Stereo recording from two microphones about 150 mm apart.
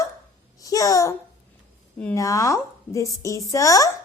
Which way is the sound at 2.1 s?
20° left (ahead or behind).